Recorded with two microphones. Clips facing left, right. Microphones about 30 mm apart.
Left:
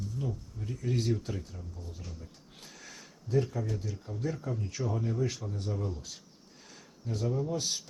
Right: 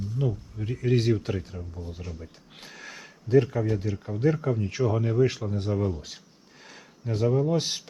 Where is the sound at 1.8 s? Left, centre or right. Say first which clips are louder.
Right 8 dB; right.